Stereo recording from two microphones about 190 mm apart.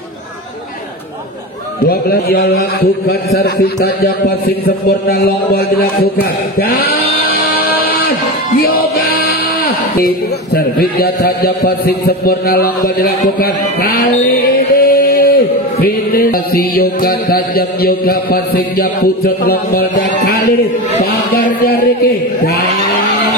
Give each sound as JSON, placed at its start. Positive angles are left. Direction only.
{"t": 1.9, "sound": "a man's voice", "side_deg": 55}
{"t": 6.6, "sound": "music", "side_deg": 50}
{"t": 8.5, "sound": "speech", "side_deg": 50}
{"t": 15.8, "sound": "music", "side_deg": 50}
{"t": 21.0, "sound": "a man's voice", "side_deg": 55}